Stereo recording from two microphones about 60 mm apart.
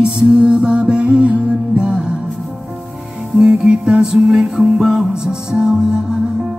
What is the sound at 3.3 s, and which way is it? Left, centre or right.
Music, centre.